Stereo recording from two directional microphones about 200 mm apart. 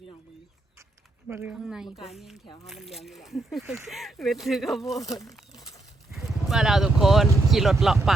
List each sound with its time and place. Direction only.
1.3 s speech: 10° right (ahead or behind)
4.9 s speech: 15° left (ahead or behind)
6.1 s speech: centre (ahead or behind)